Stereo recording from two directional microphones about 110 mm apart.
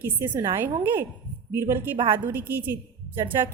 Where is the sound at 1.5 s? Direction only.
20° right (ahead or behind).